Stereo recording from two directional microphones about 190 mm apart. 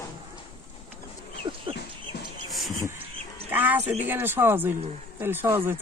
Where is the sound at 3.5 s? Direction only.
10° right (ahead or behind).